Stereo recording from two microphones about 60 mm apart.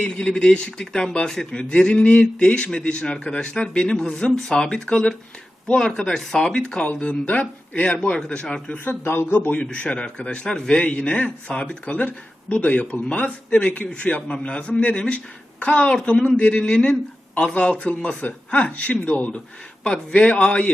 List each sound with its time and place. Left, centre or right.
0.1 s a man's voice: centre
8.8 s speech: left
9.6 s a man's voice: centre